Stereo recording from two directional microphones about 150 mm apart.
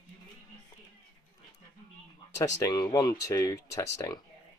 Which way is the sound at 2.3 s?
20° left (ahead or behind).